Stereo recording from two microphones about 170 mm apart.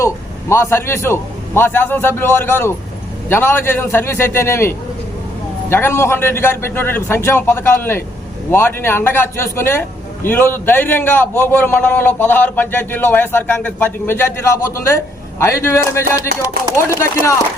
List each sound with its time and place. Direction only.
0.0 s a man's voice: 15° left (ahead or behind)